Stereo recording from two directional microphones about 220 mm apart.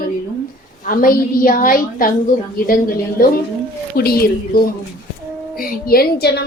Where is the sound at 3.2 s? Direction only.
40° left (ahead or behind).